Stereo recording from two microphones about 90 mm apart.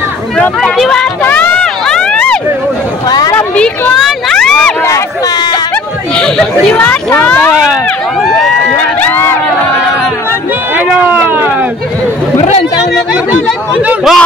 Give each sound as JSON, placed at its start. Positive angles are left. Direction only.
{"t": 0.4, "sound": "speech", "side_deg": 5}
{"t": 1.2, "sound": "run", "side_deg": 20}
{"t": 1.9, "sound": "a sound", "side_deg": 10}
{"t": 3.1, "sound": "speech", "side_deg": 45}
{"t": 3.3, "sound": "speech", "side_deg": 10}
{"t": 3.9, "sound": "a sound", "side_deg": 5}
{"t": 6.1, "sound": "speech", "side_deg": 5}
{"t": 6.7, "sound": "speech", "side_deg": 20}
{"t": 8.2, "sound": "speech", "side_deg": 0}
{"t": 8.7, "sound": "crowd", "side_deg": 20}
{"t": 11.0, "sound": "a sound", "side_deg": -20}
{"t": 13.7, "sound": "speech", "side_deg": -10}